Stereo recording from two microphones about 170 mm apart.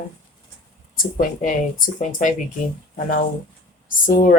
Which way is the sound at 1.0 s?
55° left (ahead or behind).